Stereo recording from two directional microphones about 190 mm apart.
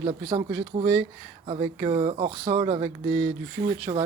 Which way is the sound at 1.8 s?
25° right (ahead or behind).